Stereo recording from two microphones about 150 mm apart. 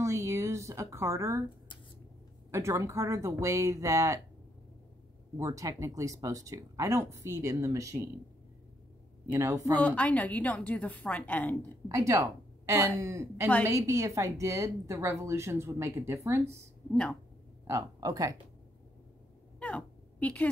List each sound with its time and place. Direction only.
0.0 s speech: 20° right (ahead or behind)
2.5 s speech: 20° right (ahead or behind)
5.4 s speech: 20° right (ahead or behind)
9.3 s speech: 20° right (ahead or behind)
9.8 s a woman's voice: 10° left (ahead or behind)
11.9 s a woman's voice: 20° right (ahead or behind)
16.9 s a woman's voice: 5° left (ahead or behind)
17.6 s speech: 25° right (ahead or behind)
19.6 s a sound: 10° left (ahead or behind)